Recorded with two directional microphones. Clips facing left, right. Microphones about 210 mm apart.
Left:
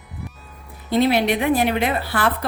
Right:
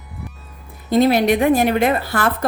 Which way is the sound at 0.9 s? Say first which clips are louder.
Right 3 dB; 45° right (ahead or behind).